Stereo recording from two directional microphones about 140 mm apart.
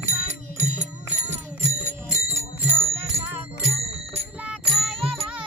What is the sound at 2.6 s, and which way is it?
Music, 15° right (ahead or behind).